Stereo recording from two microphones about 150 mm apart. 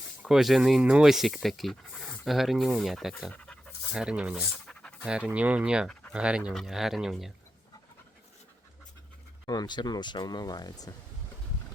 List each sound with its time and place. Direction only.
0.2 s speech: 5° right (ahead or behind)
3.3 s pant: 10° left (ahead or behind)
3.9 s speech: 5° right (ahead or behind)
4.5 s pant: 5° left (ahead or behind)
5.0 s speech: 5° right (ahead or behind)
5.9 s a sound: 5° left (ahead or behind)
6.1 s speech: 5° right (ahead or behind)
9.5 s speech: 30° left (ahead or behind)